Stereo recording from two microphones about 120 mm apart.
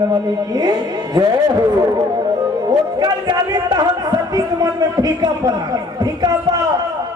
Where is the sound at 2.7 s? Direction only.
35° right (ahead or behind).